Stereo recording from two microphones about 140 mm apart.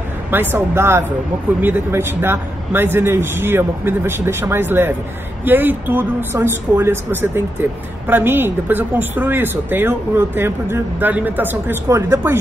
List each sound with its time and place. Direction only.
0.3 s speech: 15° right (ahead or behind)